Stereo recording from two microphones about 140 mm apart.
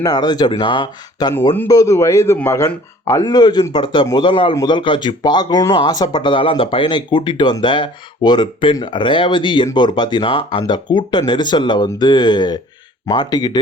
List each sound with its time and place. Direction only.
0.0 s speech: 30° left (ahead or behind)
1.5 s speech: 25° left (ahead or behind)